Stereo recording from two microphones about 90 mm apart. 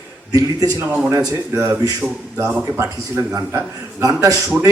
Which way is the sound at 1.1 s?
40° right (ahead or behind).